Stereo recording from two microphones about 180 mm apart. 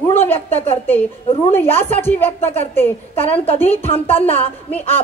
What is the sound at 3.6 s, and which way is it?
Speech, 10° left (ahead or behind).